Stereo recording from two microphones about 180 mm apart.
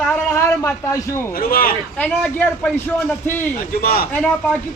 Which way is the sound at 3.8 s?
55° left (ahead or behind).